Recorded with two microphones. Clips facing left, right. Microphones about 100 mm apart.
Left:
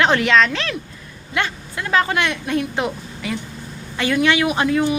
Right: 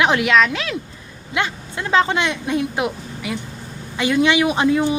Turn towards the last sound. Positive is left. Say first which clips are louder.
# right 1 dB
turn(degrees=-20)  # may be behind; listen again after turning